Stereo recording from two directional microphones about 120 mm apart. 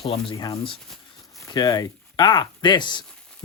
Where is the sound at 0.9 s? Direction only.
Centre (ahead or behind).